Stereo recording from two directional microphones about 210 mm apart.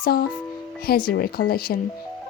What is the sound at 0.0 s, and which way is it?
Speech, 45° left (ahead or behind).